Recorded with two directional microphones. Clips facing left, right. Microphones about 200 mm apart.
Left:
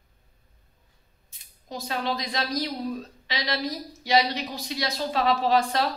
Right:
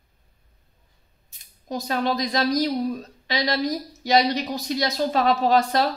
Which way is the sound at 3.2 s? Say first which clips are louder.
Right 6 dB; 45° right (ahead or behind).